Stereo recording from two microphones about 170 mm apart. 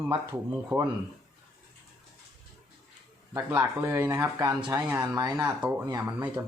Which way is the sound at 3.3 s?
15° right (ahead or behind).